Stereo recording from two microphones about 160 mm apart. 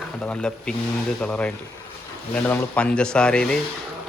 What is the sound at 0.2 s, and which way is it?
Speech, 5° left (ahead or behind).